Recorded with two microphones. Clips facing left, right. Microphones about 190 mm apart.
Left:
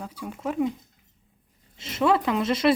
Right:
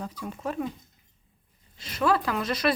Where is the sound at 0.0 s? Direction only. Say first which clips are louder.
Left 1 dB; 10° left (ahead or behind).